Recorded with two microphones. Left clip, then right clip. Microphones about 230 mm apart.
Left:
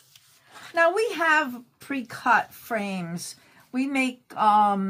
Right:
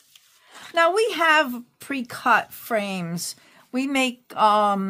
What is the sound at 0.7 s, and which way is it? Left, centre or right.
A woman's voice, right.